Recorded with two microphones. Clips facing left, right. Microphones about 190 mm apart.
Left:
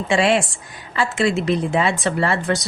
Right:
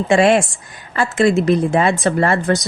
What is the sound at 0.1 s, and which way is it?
Speech, 50° right (ahead or behind).